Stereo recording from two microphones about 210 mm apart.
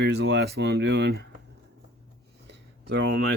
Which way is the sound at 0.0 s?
55° right (ahead or behind).